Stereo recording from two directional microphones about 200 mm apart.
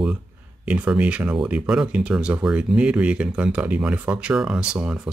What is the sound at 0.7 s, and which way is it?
Speech, 5° right (ahead or behind).